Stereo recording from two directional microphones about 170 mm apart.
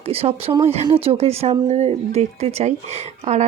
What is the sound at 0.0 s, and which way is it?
Speech, 35° right (ahead or behind).